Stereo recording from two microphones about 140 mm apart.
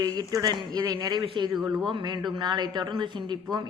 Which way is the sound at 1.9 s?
35° right (ahead or behind).